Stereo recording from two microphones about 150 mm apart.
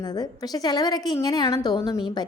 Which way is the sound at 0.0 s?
25° left (ahead or behind).